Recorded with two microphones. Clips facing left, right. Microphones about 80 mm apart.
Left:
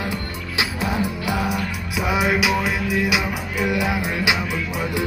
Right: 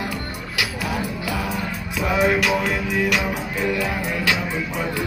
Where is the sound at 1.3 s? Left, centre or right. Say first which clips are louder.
Left 2 dB; centre.